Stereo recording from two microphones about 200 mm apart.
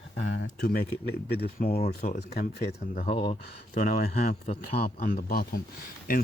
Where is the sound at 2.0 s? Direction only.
45° left (ahead or behind).